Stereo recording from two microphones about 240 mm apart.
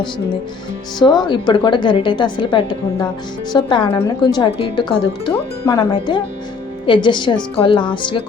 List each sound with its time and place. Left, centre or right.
0.9 s a woman's voice: centre